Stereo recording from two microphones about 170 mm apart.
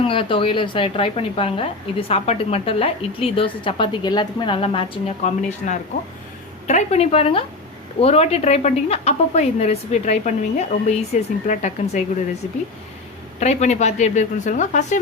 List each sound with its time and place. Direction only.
0.0 s a woman's voice: 30° left (ahead or behind); by 12.0 s 45° left (ahead or behind)
13.4 s speech: 40° left (ahead or behind)